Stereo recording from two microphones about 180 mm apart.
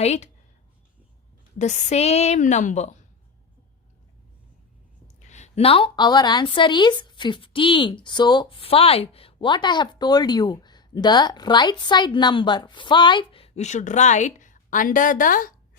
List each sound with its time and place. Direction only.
0.0 s a woman's voice: 35° left (ahead or behind)
1.5 s a woman's voice: 40° left (ahead or behind)
5.2 s speech: 40° left (ahead or behind)